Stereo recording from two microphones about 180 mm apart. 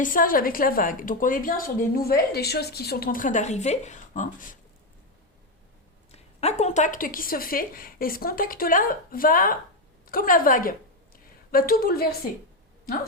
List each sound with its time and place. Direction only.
0.0 s a woman's voice: 50° left (ahead or behind)
6.1 s a woman's voice: 40° left (ahead or behind); by 12.1 s 55° left (ahead or behind)